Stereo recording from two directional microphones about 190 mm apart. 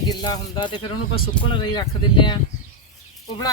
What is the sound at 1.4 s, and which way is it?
Speech, 5° left (ahead or behind).